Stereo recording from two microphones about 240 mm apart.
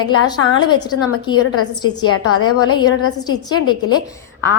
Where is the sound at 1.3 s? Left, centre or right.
Left.